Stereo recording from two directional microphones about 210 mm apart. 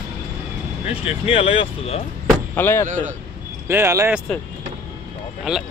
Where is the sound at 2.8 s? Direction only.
35° right (ahead or behind).